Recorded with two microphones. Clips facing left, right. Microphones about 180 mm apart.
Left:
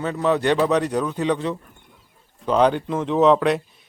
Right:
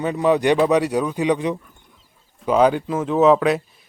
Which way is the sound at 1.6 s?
60° left (ahead or behind).